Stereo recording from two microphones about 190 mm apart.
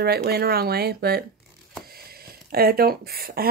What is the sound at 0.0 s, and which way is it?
Speech, 55° right (ahead or behind).